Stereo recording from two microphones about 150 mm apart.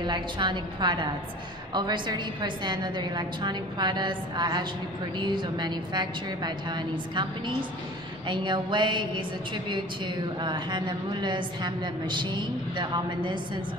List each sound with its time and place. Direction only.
0.0 s a woman's voice: 30° right (ahead or behind)
10.4 s a woman's voice: 30° right (ahead or behind)